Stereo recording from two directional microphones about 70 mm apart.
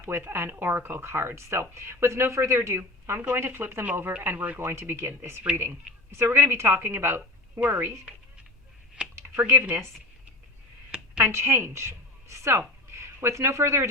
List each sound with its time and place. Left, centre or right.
0.0 s speech: right
5.4 s a woman's voice: right
6.1 s a woman's voice: right
9.0 s a sound: centre
9.3 s speech: right
11.2 s a woman's voice: right